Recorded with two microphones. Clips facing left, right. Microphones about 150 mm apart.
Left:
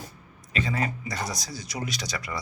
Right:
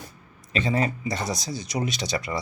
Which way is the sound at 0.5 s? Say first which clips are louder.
Right 4 dB; 25° right (ahead or behind).